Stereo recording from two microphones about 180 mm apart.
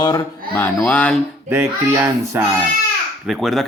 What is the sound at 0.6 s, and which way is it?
Speech, 5° left (ahead or behind).